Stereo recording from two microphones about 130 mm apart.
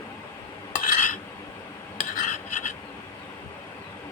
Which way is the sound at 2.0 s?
80° left.